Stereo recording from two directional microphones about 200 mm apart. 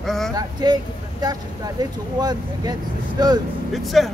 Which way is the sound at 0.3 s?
20° right (ahead or behind).